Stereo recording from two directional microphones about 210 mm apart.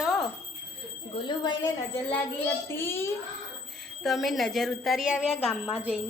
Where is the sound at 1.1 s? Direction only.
20° left (ahead or behind).